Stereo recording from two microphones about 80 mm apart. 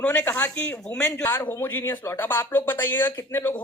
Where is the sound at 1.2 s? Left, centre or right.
Left.